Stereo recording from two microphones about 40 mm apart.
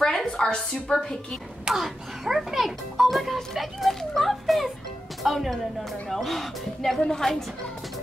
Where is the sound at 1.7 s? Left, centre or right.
Centre.